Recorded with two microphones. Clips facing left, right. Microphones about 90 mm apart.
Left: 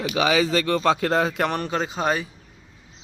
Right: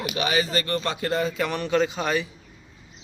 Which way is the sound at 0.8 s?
90° left.